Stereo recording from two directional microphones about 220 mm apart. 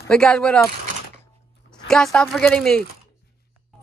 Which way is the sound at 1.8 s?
5° left (ahead or behind).